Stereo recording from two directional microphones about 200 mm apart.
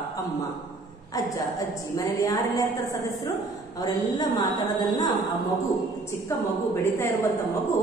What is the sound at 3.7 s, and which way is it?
A woman's voice, 20° left (ahead or behind).